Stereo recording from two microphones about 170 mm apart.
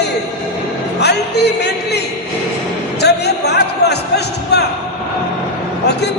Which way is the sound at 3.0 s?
75° left (ahead or behind).